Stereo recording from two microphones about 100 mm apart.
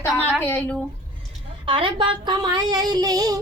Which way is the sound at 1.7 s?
60° right (ahead or behind).